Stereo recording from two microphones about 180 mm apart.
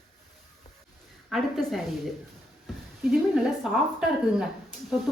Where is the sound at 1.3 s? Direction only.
Centre (ahead or behind).